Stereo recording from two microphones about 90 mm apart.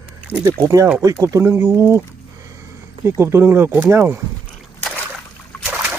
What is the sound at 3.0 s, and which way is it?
Speech, 30° right (ahead or behind).